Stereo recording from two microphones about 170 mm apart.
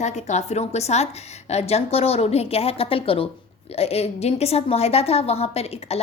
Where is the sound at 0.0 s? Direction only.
45° left (ahead or behind).